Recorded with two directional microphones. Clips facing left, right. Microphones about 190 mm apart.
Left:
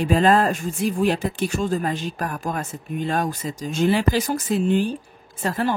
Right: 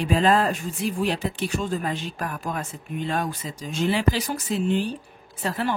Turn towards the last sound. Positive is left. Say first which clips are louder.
# left 3 dB
turn(degrees=45)  # may be behind; listen again after turning